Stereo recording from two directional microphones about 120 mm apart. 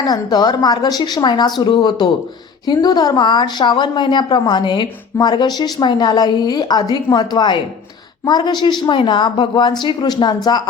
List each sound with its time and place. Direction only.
0.0 s a woman's voice: 35° left (ahead or behind)